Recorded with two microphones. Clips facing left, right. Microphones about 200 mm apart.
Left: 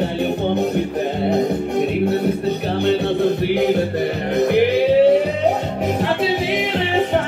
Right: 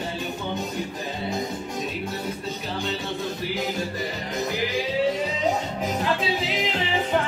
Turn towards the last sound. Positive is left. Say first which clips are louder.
# left 10 dB
turn(degrees=60)  # may be behind; listen again after turning